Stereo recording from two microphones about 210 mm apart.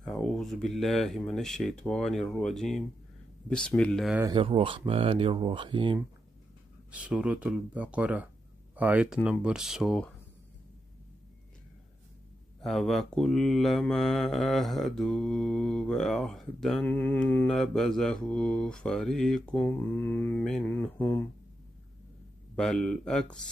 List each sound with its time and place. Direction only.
0.0 s mantra: centre (ahead or behind)
4.2 s speech: 20° right (ahead or behind)
6.9 s speech: 5° right (ahead or behind)
8.7 s mantra: 5° right (ahead or behind)
12.6 s mantra: centre (ahead or behind)
22.6 s mantra: centre (ahead or behind)